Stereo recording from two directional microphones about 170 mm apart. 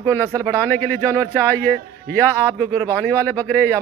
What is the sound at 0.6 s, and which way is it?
Speech, 10° left (ahead or behind).